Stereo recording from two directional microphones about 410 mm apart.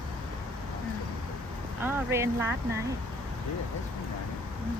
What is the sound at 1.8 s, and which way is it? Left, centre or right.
Speech, centre.